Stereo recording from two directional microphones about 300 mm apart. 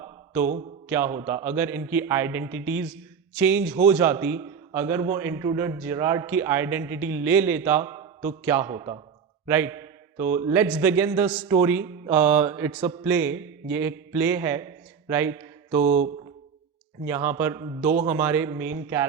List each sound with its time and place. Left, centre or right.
0.0 s mantra: centre
0.9 s a man's voice: centre
15.8 s mantra: right
17.1 s a man's voice: centre